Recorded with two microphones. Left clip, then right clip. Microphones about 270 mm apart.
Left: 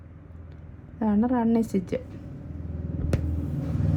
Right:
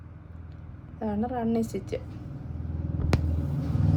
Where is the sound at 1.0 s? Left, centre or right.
Centre.